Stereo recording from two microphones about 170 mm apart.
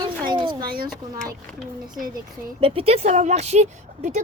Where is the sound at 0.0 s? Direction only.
25° right (ahead or behind).